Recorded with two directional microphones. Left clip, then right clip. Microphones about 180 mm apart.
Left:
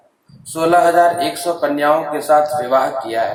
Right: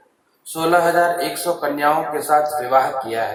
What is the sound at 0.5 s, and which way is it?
Speech, 20° left (ahead or behind).